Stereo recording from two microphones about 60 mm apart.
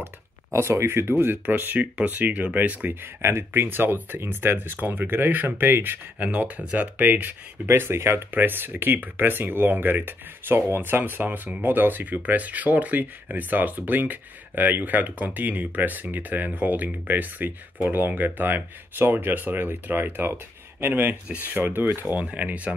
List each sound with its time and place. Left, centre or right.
0.0 s speech: right
6.1 s speech: right
22.2 s speech: right